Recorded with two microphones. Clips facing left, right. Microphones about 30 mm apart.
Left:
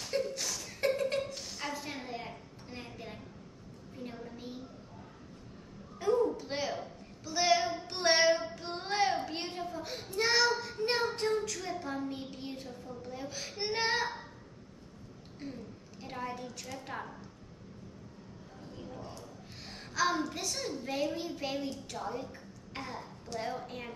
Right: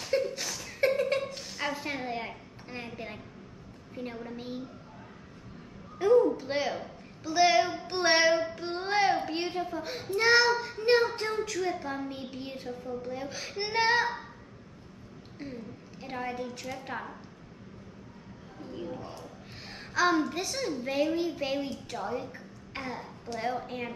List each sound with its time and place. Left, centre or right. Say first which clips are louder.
0.1 s a sound: right 5 dB; centre
1.7 s a woman's voice: right 7 dB; right
5.9 s a child's voice: right 7 dB; right
15.3 s a woman's voice: right 3 dB; centre
18.7 s a woman's voice: right 7 dB; right
19.7 s a woman's voice: right 5 dB; centre